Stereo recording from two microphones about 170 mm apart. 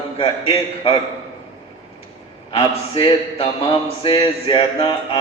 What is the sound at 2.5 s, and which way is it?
A man's voice, 30° left (ahead or behind).